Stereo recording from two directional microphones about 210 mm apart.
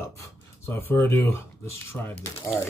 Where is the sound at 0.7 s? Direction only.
10° left (ahead or behind).